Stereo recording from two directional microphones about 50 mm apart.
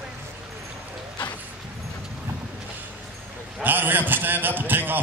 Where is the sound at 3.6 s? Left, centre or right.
Right.